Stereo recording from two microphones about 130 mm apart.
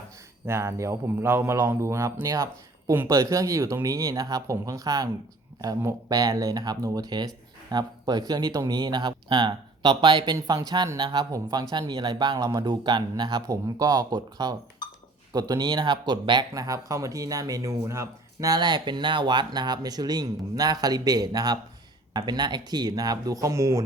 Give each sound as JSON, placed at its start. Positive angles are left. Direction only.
{"t": 0.4, "sound": "a man's voice", "side_deg": -20}
{"t": 14.8, "sound": "a sound", "side_deg": 35}
{"t": 15.3, "sound": "a man's voice", "side_deg": -30}